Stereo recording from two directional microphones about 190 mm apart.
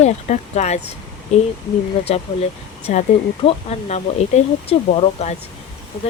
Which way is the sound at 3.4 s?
35° left (ahead or behind).